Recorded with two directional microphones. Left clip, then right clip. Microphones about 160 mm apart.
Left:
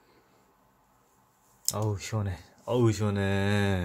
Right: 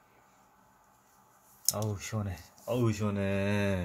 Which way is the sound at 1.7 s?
25° left (ahead or behind).